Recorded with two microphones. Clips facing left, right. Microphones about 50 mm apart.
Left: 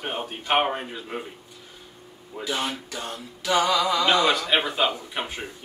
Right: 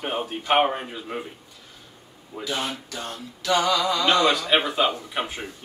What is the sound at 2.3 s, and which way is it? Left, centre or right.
Speech, centre.